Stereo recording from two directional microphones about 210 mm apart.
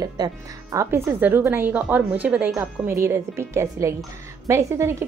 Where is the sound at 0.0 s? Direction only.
15° right (ahead or behind).